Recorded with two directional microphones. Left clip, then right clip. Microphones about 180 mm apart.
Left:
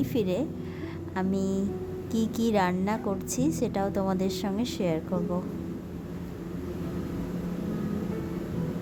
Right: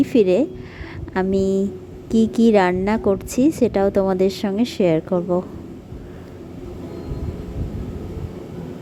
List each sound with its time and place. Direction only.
0.0 s a woman's voice: 40° right (ahead or behind)